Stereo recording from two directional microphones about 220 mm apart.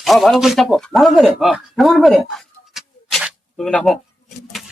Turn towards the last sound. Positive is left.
turn(degrees=0)  # may be behind; listen again after turning